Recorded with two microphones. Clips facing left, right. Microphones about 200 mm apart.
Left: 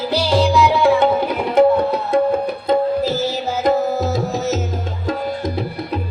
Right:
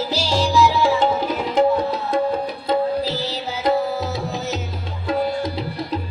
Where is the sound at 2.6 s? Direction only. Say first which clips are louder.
Left 3 dB; 50° left (ahead or behind).